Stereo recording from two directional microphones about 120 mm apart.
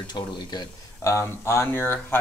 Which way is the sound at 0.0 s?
35° left (ahead or behind).